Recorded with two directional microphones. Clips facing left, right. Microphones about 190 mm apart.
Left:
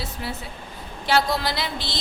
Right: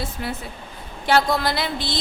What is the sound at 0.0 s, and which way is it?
A woman's voice, 55° right (ahead or behind).